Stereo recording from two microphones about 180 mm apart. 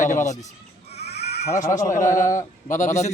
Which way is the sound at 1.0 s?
65° left (ahead or behind).